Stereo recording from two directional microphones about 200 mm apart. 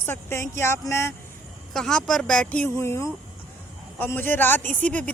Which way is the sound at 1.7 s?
5° left (ahead or behind).